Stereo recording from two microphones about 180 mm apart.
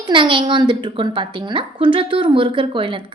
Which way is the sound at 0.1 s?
25° right (ahead or behind).